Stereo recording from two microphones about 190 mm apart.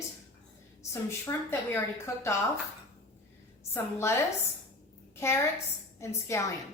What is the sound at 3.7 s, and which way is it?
Speech, 15° left (ahead or behind).